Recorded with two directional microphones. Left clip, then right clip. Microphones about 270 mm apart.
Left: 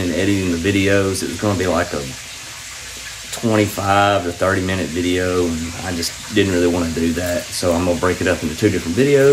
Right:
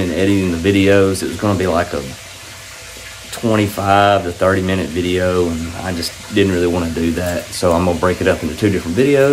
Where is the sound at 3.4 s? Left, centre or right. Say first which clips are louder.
Right 2 dB; centre.